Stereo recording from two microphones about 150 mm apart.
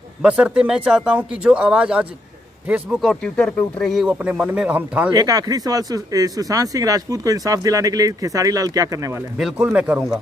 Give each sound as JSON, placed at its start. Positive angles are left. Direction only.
{"t": 0.2, "sound": "speech", "side_deg": -5}
{"t": 3.0, "sound": "speech", "side_deg": 5}
{"t": 4.1, "sound": "speech", "side_deg": -10}
{"t": 5.1, "sound": "speech", "side_deg": -25}
{"t": 9.4, "sound": "speech", "side_deg": -5}